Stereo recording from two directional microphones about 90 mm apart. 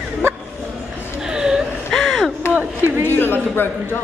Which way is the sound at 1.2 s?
10° right (ahead or behind).